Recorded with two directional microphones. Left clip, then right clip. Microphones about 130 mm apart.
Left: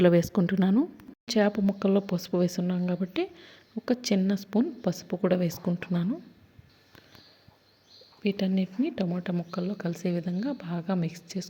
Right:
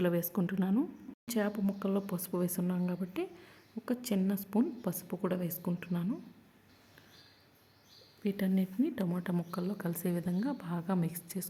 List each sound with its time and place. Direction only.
0.0 s speech: 30° left (ahead or behind)
1.2 s a woman's voice: 20° left (ahead or behind)
5.2 s speech: 25° left (ahead or behind)
8.2 s a woman's voice: 20° left (ahead or behind)
9.3 s speech: centre (ahead or behind)
9.6 s a woman's voice: 10° left (ahead or behind)